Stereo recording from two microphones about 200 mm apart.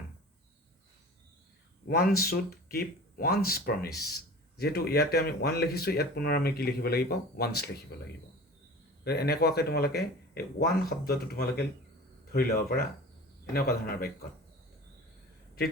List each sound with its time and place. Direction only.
1.9 s speech: 50° left (ahead or behind)
9.0 s speech: 50° left (ahead or behind)